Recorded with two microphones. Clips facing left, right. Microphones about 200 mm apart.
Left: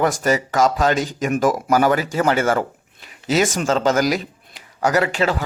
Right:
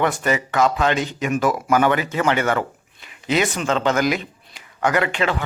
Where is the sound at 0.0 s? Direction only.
40° left (ahead or behind).